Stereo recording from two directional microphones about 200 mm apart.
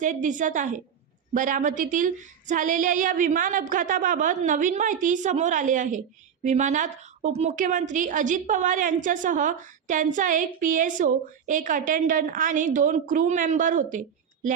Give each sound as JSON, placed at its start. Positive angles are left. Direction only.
{"t": 0.0, "sound": "a woman's voice", "side_deg": -40}